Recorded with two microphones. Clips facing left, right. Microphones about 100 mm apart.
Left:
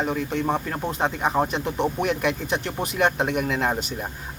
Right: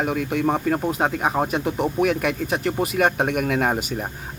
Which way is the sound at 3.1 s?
55° right (ahead or behind).